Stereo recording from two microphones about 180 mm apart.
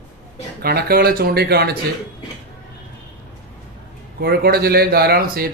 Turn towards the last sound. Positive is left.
turn(degrees=-55)  # may be behind; listen again after turning